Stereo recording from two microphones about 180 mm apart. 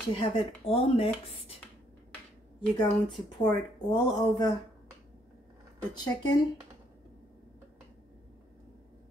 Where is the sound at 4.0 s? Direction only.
25° left (ahead or behind).